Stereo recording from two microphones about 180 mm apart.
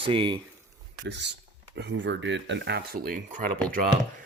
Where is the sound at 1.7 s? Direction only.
80° right; by 3.5 s 45° right (ahead or behind).